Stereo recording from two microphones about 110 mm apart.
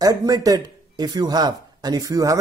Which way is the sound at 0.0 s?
35° right (ahead or behind).